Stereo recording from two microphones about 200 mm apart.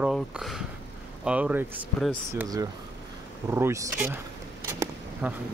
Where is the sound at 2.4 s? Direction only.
20° right (ahead or behind).